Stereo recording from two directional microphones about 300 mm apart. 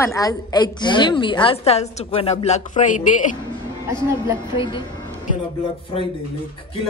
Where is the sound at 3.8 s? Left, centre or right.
Centre.